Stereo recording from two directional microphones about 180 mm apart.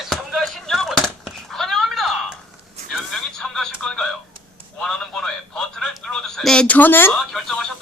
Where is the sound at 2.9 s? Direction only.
5° left (ahead or behind).